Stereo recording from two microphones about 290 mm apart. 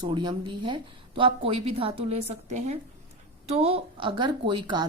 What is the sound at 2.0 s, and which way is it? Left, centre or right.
A woman's voice, right.